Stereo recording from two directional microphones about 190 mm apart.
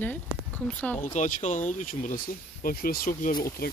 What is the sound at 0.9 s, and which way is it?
Speech, 40° left (ahead or behind).